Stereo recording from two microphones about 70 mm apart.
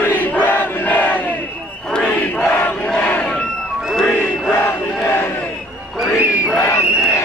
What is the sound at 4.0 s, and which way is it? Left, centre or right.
Music, centre.